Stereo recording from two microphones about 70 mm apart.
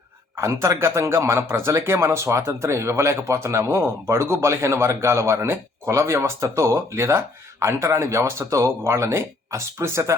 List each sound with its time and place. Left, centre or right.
0.3 s speech: right